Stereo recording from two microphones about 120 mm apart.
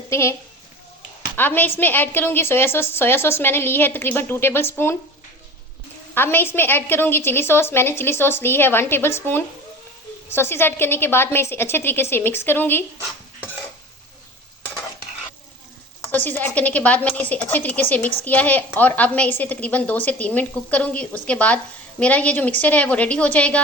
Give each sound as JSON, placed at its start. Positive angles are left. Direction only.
{"t": 0.1, "sound": "a woman's voice", "side_deg": 25}
{"t": 1.4, "sound": "a woman's voice", "side_deg": 15}
{"t": 6.1, "sound": "a woman's voice", "side_deg": 20}
{"t": 16.1, "sound": "a woman's voice", "side_deg": 15}